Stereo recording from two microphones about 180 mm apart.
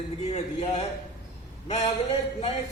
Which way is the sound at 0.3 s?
40° left (ahead or behind).